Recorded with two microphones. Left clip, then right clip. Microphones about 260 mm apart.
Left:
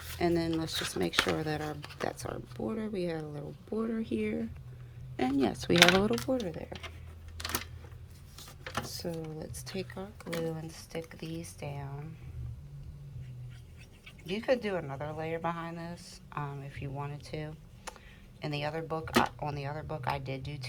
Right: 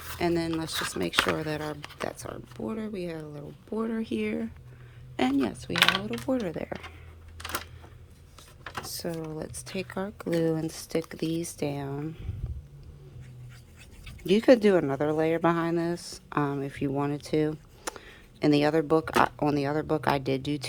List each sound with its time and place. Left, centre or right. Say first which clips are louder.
0.2 s speech: right 2 dB; centre
5.6 s speech: left 2 dB; centre
6.2 s speech: right 4 dB; centre
8.8 s a sound: right 4 dB; centre
9.4 s speech: right 4 dB; centre; by 12.1 s right
14.0 s speech: right 12 dB; right